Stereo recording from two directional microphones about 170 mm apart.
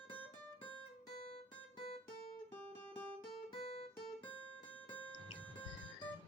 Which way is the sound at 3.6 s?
35° left (ahead or behind).